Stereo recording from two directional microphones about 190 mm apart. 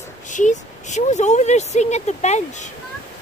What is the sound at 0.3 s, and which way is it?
Speech, 40° left (ahead or behind).